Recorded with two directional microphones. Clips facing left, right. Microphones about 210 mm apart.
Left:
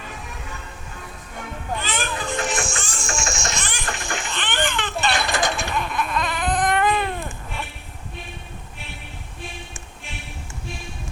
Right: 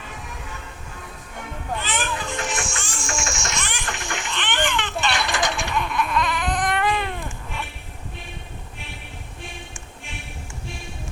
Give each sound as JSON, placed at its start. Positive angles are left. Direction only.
{"t": 1.8, "sound": "music", "side_deg": 40}